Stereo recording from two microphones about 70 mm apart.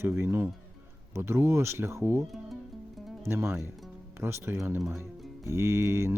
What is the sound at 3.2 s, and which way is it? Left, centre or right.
Speech, right.